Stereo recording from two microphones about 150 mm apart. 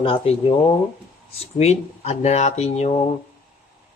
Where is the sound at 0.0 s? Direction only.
35° left (ahead or behind).